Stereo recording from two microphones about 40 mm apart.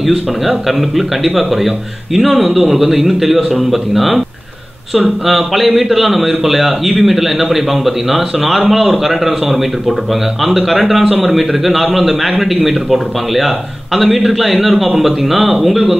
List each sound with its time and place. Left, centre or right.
0.0 s a man's voice: centre
5.2 s a man's voice: centre